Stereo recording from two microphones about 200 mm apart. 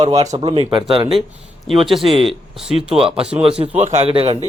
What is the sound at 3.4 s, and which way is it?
Speech, 30° right (ahead or behind).